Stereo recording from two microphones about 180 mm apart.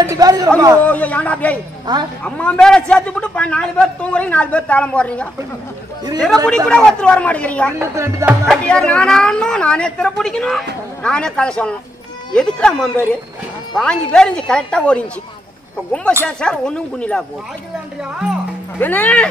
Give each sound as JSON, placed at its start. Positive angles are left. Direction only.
{"t": 0.0, "sound": "speech", "side_deg": -20}
{"t": 0.8, "sound": "a man's voice", "side_deg": 10}
{"t": 1.9, "sound": "speech", "side_deg": -25}
{"t": 2.2, "sound": "a man's voice", "side_deg": 5}
{"t": 7.9, "sound": "speech", "side_deg": -15}
{"t": 8.5, "sound": "a woman's voice", "side_deg": 5}
{"t": 16.3, "sound": "a woman's voice", "side_deg": 5}
{"t": 18.8, "sound": "a man's voice", "side_deg": 10}